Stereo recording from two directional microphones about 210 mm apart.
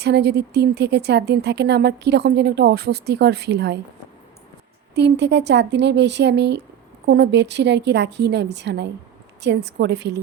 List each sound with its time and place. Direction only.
0.0 s speech: 50° right (ahead or behind)
4.9 s a woman's voice: 55° right (ahead or behind)